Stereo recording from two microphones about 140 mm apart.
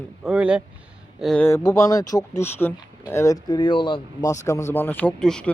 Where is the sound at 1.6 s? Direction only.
25° left (ahead or behind).